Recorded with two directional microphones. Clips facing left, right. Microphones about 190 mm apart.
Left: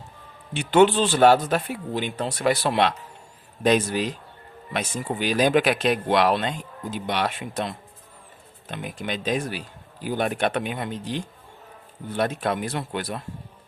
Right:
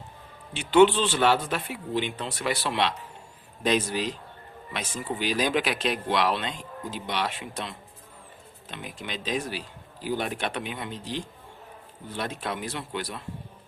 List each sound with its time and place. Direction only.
0.5 s speech: 45° left (ahead or behind)